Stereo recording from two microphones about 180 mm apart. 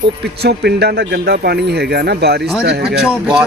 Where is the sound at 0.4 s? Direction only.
65° right (ahead or behind).